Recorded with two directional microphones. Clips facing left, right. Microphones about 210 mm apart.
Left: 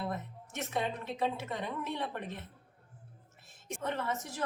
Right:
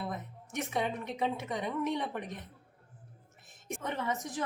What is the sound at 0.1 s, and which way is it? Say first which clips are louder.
Music: even; 15° right (ahead or behind).